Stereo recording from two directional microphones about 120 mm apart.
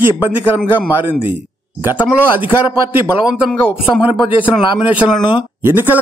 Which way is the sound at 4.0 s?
45° left (ahead or behind).